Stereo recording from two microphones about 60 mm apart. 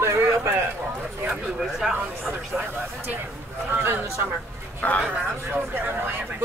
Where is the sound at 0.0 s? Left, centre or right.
Right.